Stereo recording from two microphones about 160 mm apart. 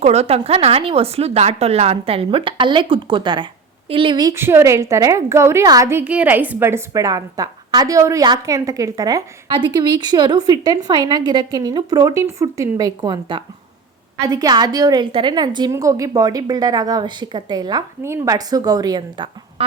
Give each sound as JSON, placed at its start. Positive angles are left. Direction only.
{"t": 0.0, "sound": "a woman's voice", "side_deg": -40}